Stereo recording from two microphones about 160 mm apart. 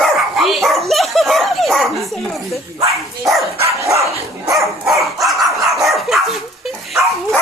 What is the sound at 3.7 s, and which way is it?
Dog, 20° right (ahead or behind).